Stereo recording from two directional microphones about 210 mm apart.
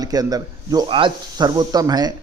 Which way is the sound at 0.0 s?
15° right (ahead or behind).